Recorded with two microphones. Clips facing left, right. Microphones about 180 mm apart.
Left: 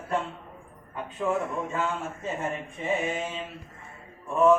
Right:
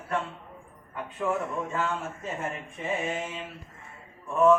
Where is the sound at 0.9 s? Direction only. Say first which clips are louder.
Left 1 dB; 15° left (ahead or behind).